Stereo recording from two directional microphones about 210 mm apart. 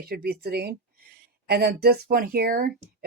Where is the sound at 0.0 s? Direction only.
45° right (ahead or behind).